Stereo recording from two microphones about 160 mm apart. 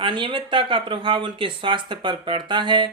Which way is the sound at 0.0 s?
30° right (ahead or behind).